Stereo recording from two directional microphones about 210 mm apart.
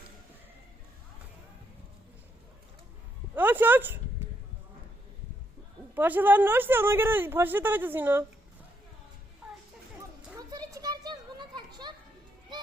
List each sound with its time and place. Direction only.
3.3 s speech: 10° right (ahead or behind)
5.9 s speech: 10° right (ahead or behind)
9.4 s a sound: 5° right (ahead or behind)
10.3 s children playing: 15° right (ahead or behind)